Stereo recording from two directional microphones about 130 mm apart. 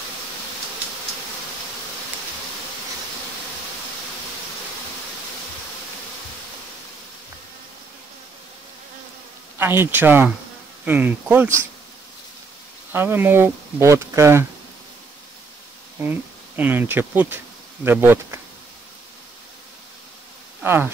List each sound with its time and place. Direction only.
9.6 s speech: 15° right (ahead or behind)
12.9 s speech: 15° right (ahead or behind)
16.0 s speech: 15° right (ahead or behind)
20.6 s speech: 15° right (ahead or behind)